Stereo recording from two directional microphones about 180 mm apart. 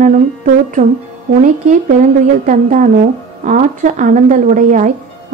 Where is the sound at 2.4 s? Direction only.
45° right (ahead or behind).